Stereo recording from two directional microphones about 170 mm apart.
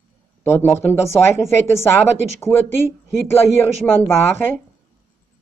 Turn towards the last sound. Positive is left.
turn(degrees=15)  # may be behind; listen again after turning